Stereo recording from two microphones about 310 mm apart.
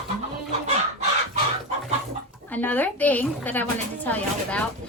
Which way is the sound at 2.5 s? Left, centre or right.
Centre.